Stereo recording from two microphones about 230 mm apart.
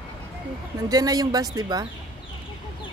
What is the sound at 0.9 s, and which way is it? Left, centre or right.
Speech, centre.